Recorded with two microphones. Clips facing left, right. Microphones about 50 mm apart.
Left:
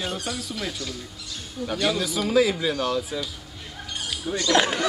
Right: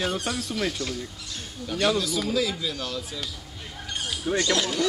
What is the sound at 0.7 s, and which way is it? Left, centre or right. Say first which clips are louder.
Speech: right 2 dB; right.